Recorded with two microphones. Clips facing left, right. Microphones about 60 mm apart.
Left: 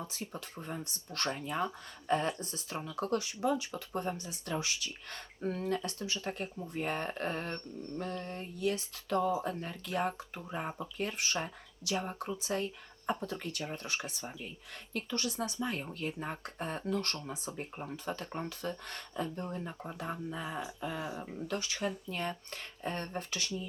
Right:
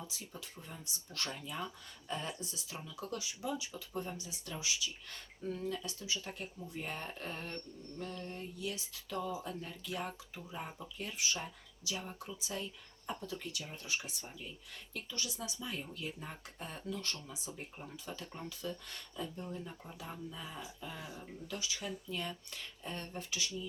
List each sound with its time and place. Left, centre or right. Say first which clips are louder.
0.0 s speech: left 6 dB; left